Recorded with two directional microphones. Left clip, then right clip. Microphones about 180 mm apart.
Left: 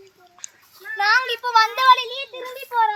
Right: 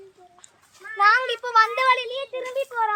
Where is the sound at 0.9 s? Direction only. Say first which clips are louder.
Even; 30° right (ahead or behind).